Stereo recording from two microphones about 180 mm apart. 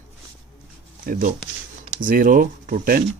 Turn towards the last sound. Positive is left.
turn(degrees=-50)  # may be behind; listen again after turning